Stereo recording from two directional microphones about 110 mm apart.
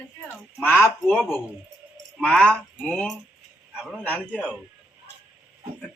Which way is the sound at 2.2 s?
10° left (ahead or behind).